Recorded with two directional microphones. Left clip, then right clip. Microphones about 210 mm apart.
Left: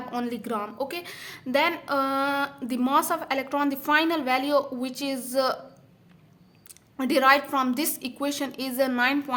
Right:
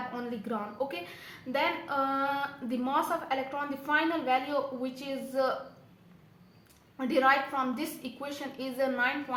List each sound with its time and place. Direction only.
0.1 s a woman's voice: 45° left (ahead or behind)
6.9 s a woman's voice: 45° left (ahead or behind)